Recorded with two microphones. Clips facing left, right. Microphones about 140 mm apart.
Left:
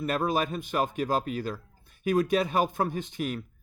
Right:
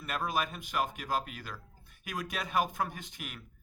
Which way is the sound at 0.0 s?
30° left (ahead or behind).